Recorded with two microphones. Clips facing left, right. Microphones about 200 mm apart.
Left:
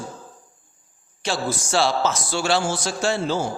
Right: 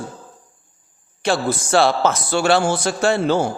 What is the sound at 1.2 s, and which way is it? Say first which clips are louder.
A man's voice: right 5 dB; 60° right (ahead or behind).